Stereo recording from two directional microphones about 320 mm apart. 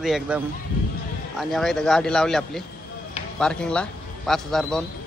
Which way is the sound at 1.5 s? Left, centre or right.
Centre.